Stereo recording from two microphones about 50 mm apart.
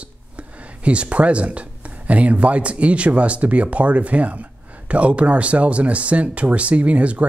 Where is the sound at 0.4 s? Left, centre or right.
Right.